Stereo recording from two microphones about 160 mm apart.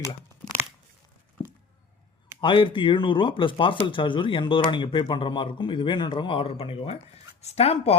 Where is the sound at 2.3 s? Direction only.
30° left (ahead or behind).